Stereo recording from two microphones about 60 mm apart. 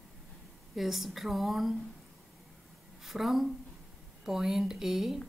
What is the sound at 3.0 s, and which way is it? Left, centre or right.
A woman's voice, centre.